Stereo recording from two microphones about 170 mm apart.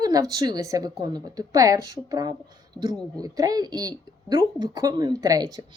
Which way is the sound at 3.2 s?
20° right (ahead or behind).